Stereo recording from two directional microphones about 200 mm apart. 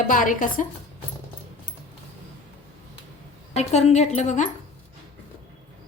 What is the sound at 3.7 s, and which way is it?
Speech, 35° left (ahead or behind).